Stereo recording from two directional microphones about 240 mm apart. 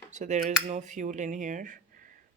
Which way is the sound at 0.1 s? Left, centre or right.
Right.